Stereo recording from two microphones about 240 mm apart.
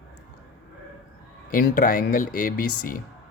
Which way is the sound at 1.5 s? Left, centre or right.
Left.